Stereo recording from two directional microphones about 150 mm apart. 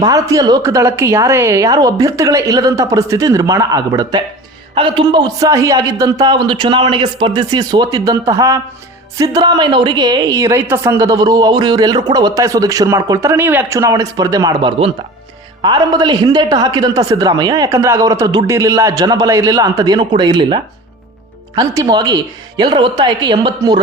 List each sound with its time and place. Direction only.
0.0 s a woman's voice: 25° right (ahead or behind)